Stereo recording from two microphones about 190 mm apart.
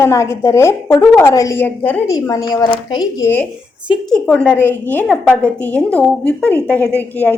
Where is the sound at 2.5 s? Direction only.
20° left (ahead or behind).